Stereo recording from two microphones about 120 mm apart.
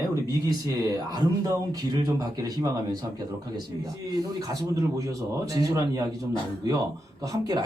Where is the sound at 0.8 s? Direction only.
35° right (ahead or behind).